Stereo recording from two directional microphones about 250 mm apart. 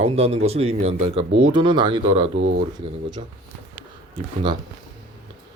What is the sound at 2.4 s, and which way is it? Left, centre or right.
Speech, right.